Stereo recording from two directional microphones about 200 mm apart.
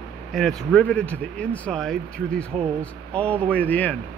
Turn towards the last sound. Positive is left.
turn(degrees=10)  # may be behind; listen again after turning